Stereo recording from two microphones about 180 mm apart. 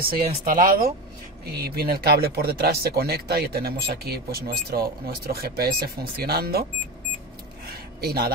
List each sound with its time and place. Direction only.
0.0 s speech: 50° right (ahead or behind)
1.4 s speech: 60° right (ahead or behind)
7.6 s a sound: 60° right (ahead or behind)